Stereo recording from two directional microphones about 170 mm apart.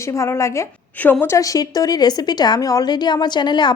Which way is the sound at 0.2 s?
15° left (ahead or behind).